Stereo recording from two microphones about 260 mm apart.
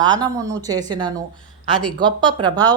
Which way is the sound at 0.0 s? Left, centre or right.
Centre.